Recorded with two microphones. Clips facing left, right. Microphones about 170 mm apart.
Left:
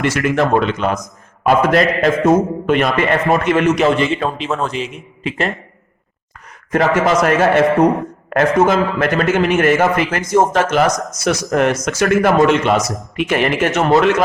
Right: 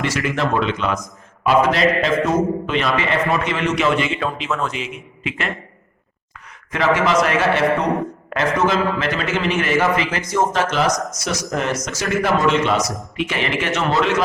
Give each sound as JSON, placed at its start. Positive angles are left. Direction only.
{"t": 0.0, "sound": "a man's voice", "side_deg": 50}
{"t": 6.7, "sound": "a man's voice", "side_deg": 45}